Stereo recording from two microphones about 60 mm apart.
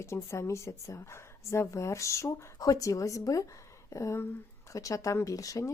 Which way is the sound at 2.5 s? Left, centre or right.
Left.